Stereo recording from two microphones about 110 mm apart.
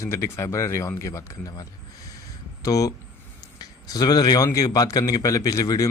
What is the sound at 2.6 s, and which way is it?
A man's voice, 35° left (ahead or behind).